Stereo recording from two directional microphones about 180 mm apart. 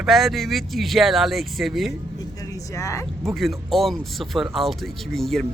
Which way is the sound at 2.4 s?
20° left (ahead or behind).